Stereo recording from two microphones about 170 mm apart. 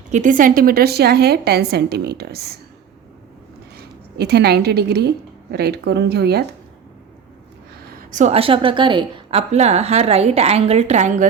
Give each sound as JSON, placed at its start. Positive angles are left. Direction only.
{"t": 0.1, "sound": "a woman's voice", "side_deg": -50}
{"t": 4.2, "sound": "a woman's voice", "side_deg": -75}
{"t": 7.9, "sound": "a sound", "side_deg": -60}
{"t": 8.2, "sound": "a woman's voice", "side_deg": -35}